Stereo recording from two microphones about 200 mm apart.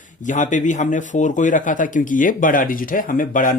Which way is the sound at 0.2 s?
40° left (ahead or behind).